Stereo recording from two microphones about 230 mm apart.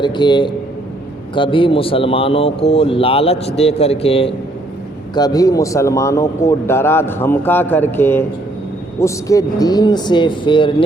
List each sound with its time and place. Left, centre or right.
0.0 s speech: centre